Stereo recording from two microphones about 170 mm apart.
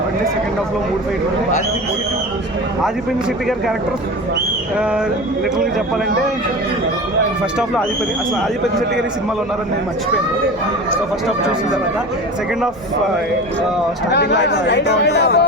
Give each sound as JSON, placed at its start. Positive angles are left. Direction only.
{"t": 14.1, "sound": "speech", "side_deg": 80}